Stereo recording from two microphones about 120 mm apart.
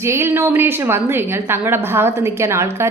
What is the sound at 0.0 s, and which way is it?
A woman's voice, 20° right (ahead or behind).